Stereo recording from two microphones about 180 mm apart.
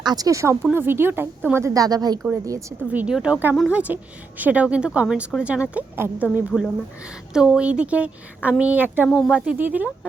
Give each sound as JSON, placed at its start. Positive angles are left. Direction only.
{"t": 0.0, "sound": "a woman's voice", "side_deg": -20}
{"t": 6.5, "sound": "a woman's voice", "side_deg": 5}
{"t": 9.0, "sound": "a woman's voice", "side_deg": 0}